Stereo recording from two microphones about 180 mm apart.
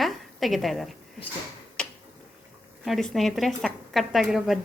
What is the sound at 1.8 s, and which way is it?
Finger snapping, 5° left (ahead or behind).